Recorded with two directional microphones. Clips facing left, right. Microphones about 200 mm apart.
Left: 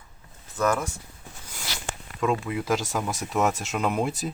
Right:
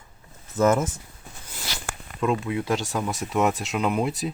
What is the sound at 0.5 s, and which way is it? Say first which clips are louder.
Speech: right 5 dB; 20° right (ahead or behind).